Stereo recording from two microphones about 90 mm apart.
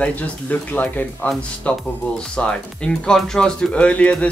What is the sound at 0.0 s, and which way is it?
Speech, 15° left (ahead or behind).